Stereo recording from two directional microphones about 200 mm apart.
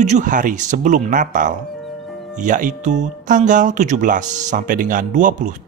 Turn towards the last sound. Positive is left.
turn(degrees=-40)  # may be behind; listen again after turning